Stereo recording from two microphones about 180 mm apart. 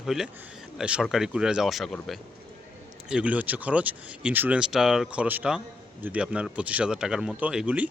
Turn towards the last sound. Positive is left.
turn(degrees=-5)  # may be behind; listen again after turning